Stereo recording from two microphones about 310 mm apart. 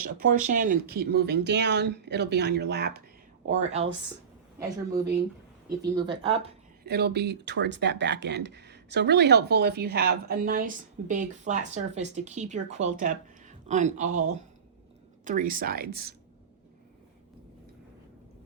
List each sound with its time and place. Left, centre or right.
0.0 s speech: right
3.5 s speech: right
5.8 s speech: centre
6.8 s speech: right